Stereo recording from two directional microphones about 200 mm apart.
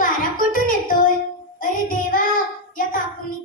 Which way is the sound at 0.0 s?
45° left (ahead or behind).